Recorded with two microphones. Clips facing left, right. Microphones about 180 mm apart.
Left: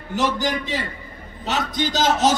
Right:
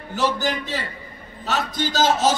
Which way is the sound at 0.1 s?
15° left (ahead or behind).